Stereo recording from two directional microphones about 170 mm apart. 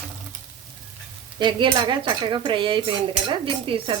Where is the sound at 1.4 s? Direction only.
30° right (ahead or behind).